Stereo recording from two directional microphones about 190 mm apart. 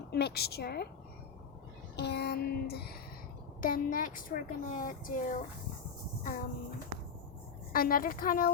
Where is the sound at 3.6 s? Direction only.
45° left (ahead or behind).